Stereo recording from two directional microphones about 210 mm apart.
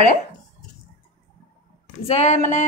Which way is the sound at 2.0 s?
30° left (ahead or behind).